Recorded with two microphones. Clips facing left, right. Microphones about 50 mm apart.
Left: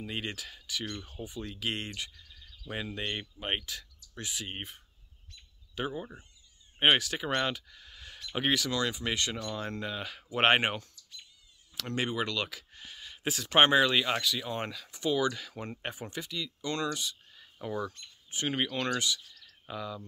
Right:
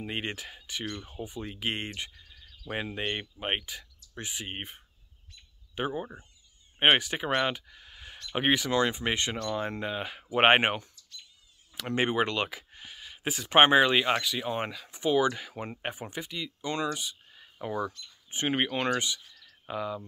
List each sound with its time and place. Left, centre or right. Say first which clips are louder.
0.0 s speech: right 3 dB; right
7.4 s a sound: right 3 dB; centre
8.4 s speech: right 4 dB; right
12.4 s speech: right 3 dB; centre
18.3 s speech: right 3 dB; right